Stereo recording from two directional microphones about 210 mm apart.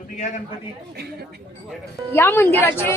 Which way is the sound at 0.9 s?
50° right (ahead or behind).